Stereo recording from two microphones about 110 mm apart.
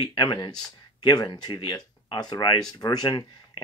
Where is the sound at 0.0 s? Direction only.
45° left (ahead or behind).